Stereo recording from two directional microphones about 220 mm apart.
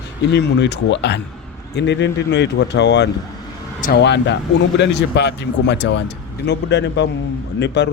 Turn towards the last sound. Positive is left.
turn(degrees=50)  # may be behind; listen again after turning